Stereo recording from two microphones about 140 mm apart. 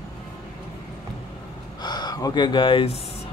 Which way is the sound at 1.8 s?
30° left (ahead or behind).